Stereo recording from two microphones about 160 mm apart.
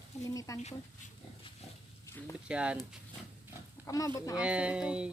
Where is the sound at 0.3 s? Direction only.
20° left (ahead or behind).